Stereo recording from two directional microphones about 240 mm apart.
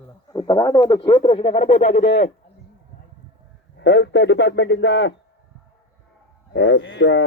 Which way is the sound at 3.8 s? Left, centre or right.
Left.